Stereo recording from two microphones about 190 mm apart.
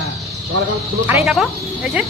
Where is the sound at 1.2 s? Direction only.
Centre (ahead or behind).